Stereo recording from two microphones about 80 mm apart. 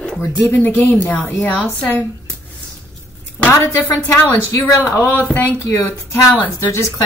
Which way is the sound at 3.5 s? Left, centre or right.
Left.